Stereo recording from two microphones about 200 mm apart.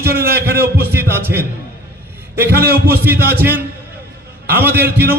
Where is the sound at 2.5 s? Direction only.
50° right (ahead or behind).